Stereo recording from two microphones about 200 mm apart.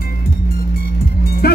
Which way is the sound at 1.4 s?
50° left (ahead or behind).